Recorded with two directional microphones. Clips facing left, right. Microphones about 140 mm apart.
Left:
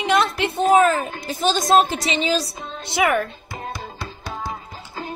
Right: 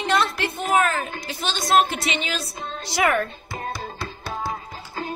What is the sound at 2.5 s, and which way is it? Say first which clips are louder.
Speech: left 1 dB; 20° left (ahead or behind).